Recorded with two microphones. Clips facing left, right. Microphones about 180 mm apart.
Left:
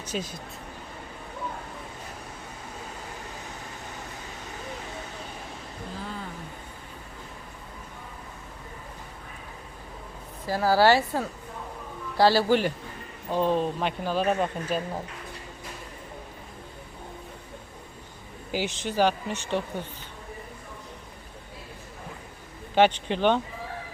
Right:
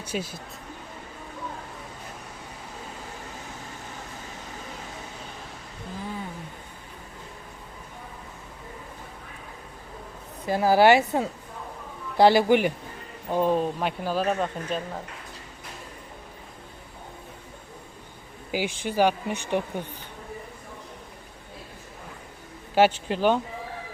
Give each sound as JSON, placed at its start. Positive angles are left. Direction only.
{"t": 0.0, "sound": "speech", "side_deg": -10}
{"t": 10.4, "sound": "speech", "side_deg": -20}
{"t": 18.5, "sound": "speech", "side_deg": -10}
{"t": 22.7, "sound": "speech", "side_deg": -5}